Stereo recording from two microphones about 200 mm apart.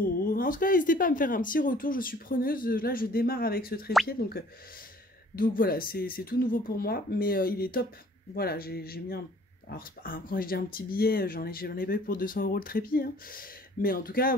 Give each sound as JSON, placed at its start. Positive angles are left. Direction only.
{"t": 0.0, "sound": "speech", "side_deg": 45}